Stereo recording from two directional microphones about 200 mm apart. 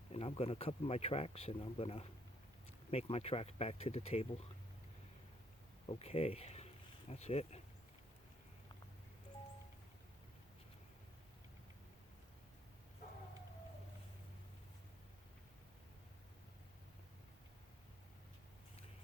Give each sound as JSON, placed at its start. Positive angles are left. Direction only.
{"t": 0.1, "sound": "speech", "side_deg": 30}
{"t": 5.8, "sound": "speech", "side_deg": 30}